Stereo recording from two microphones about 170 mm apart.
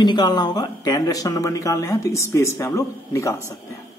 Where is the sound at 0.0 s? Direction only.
25° left (ahead or behind).